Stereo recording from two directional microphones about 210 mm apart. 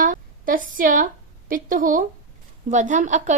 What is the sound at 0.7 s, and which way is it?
A woman's voice, 40° right (ahead or behind).